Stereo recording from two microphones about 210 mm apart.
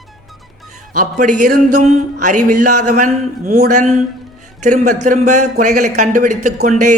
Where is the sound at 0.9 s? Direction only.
35° right (ahead or behind).